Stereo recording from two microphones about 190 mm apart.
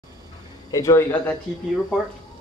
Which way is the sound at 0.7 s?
15° left (ahead or behind).